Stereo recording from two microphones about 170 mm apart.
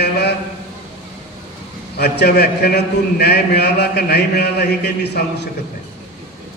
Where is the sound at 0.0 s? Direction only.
75° left (ahead or behind).